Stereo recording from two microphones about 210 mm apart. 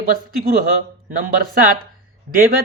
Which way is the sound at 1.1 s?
40° right (ahead or behind).